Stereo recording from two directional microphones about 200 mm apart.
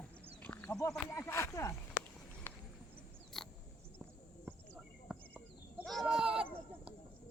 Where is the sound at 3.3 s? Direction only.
Centre (ahead or behind).